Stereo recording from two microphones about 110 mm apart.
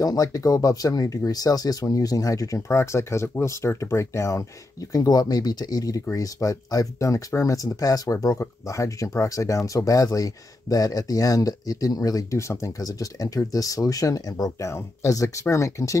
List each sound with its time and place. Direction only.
0.0 s speech: 35° left (ahead or behind)